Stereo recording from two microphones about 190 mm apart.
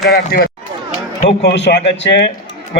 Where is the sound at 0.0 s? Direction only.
55° left (ahead or behind).